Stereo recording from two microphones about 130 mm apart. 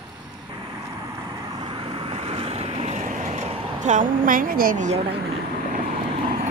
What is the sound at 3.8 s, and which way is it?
Speech, 80° right.